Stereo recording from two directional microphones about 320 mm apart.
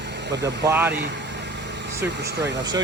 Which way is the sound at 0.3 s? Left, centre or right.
Right.